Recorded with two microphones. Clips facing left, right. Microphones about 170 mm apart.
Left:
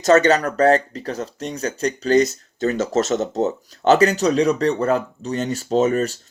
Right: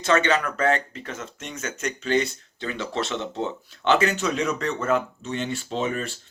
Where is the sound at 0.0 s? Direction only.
40° left (ahead or behind).